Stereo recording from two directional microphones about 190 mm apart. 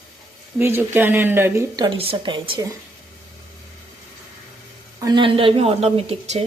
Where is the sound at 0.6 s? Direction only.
10° right (ahead or behind).